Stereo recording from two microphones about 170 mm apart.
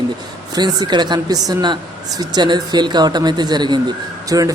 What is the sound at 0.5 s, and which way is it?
A woman's voice, 25° right (ahead or behind).